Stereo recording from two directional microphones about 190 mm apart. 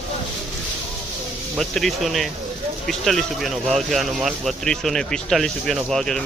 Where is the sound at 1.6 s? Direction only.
Centre (ahead or behind).